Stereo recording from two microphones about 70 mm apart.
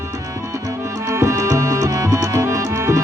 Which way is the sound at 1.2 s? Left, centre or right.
Right.